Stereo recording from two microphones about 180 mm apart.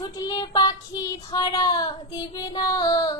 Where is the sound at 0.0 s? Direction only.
20° left (ahead or behind).